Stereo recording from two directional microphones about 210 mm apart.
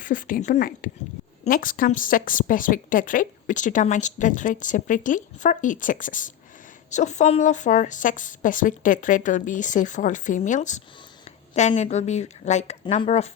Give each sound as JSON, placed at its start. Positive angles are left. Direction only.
{"t": 0.0, "sound": "a woman's voice", "side_deg": 40}